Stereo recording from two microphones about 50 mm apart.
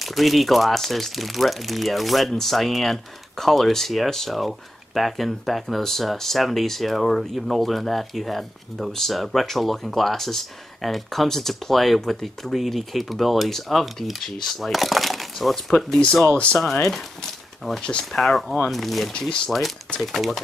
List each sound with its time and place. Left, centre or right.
0.0 s speech: centre
16.3 s speech: left
17.8 s speech: centre
18.2 s speech: centre
19.1 s speech: centre
20.0 s speech: centre